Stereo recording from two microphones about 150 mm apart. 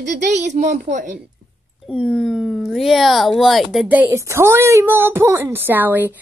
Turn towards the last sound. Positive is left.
turn(degrees=-10)  # may be behind; listen again after turning